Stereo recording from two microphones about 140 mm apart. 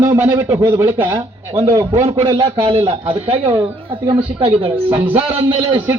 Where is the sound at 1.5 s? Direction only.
45° right (ahead or behind).